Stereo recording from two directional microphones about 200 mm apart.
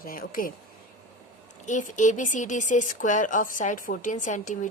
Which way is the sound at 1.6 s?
40° left (ahead or behind).